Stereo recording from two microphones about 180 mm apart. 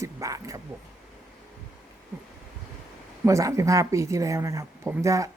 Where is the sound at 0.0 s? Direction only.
20° right (ahead or behind).